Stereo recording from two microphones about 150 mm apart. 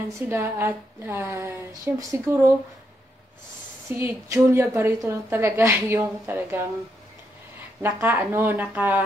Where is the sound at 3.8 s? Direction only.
15° right (ahead or behind).